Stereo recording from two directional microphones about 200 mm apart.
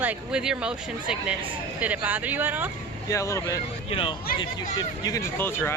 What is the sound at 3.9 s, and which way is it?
Speech, 25° left (ahead or behind).